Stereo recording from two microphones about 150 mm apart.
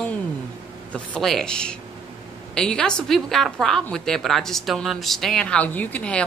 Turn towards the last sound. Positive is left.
turn(degrees=10)  # may be behind; listen again after turning